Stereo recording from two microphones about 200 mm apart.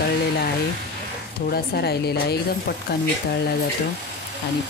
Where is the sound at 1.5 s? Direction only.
50° left (ahead or behind).